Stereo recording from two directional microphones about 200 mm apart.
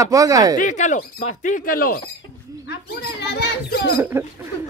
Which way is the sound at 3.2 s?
55° left (ahead or behind).